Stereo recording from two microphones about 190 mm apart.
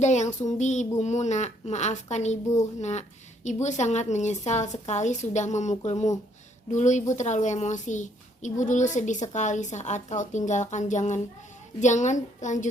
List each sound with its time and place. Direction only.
0.0 s a child's voice: 40° left (ahead or behind)
3.4 s a child's voice: 40° left (ahead or behind)